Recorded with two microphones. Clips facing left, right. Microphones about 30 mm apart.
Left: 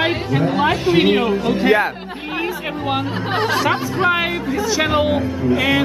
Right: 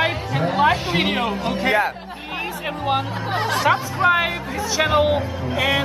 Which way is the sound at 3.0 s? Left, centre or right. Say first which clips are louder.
Left 4 dB; left.